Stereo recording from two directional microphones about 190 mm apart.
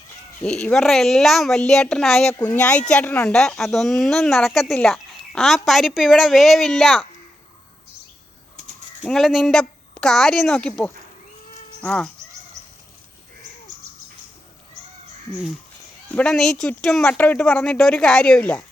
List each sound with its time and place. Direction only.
0.4 s a woman's voice: 5° left (ahead or behind)
9.0 s a woman's voice: 5° left (ahead or behind)
16.0 s a woman's voice: 5° left (ahead or behind)